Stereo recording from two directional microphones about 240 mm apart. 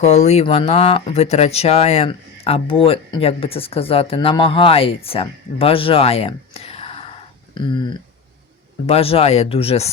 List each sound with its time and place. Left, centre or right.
0.0 s speech: left